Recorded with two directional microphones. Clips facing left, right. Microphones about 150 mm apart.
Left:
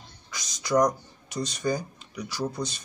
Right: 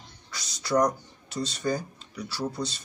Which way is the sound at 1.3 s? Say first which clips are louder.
Left 1 dB; 15° left (ahead or behind).